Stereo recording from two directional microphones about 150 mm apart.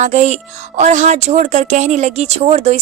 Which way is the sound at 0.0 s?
50° right (ahead or behind).